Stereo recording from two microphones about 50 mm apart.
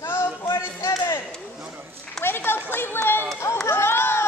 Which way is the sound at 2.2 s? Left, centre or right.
Left.